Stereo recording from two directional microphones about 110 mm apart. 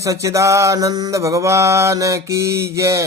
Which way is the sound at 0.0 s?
30° right (ahead or behind).